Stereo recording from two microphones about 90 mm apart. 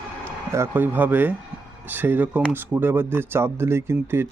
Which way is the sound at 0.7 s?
20° right (ahead or behind).